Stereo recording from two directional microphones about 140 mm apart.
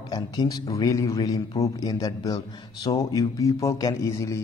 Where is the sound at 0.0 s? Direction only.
30° left (ahead or behind).